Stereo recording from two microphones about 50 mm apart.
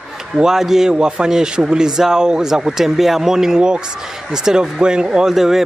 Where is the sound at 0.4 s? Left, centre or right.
Centre.